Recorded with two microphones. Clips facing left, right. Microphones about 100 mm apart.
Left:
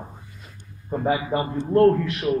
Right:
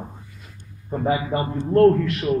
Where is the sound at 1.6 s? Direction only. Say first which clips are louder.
Right 2 dB; 20° left (ahead or behind).